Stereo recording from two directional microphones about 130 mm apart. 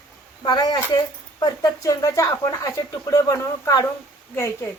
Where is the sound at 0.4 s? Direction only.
30° left (ahead or behind).